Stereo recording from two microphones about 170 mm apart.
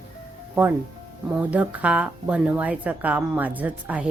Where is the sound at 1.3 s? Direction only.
10° right (ahead or behind).